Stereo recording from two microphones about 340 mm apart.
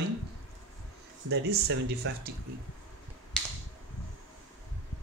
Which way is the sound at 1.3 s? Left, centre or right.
Right.